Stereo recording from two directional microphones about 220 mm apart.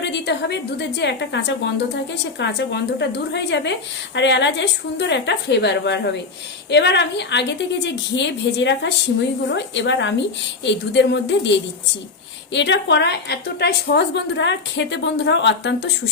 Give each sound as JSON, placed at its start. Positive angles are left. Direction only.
{"t": 0.0, "sound": "a woman's voice", "side_deg": 50}
{"t": 12.5, "sound": "a woman's voice", "side_deg": 55}